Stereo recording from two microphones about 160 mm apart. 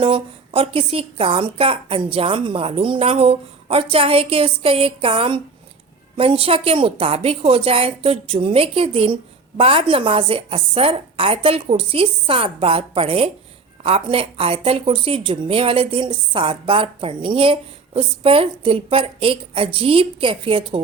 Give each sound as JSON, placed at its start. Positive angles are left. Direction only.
{"t": 0.0, "sound": "a woman's voice", "side_deg": -35}